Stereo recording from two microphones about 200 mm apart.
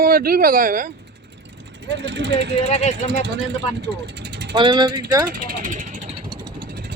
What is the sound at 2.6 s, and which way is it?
Speech, 30° left (ahead or behind).